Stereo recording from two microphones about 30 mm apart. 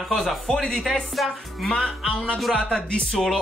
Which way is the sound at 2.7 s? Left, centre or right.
Left.